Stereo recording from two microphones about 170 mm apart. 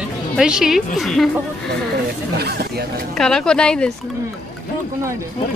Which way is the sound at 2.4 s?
70° right (ahead or behind).